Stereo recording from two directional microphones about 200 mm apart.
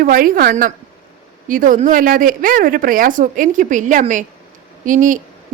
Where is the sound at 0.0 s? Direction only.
45° right (ahead or behind).